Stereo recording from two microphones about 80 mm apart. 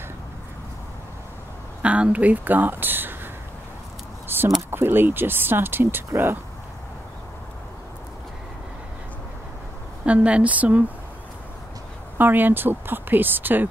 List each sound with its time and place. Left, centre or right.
1.8 s speech: centre
4.6 s speech: right
10.0 s a woman's voice: centre
12.2 s speech: right